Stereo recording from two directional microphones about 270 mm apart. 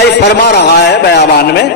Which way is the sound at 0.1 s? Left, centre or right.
Left.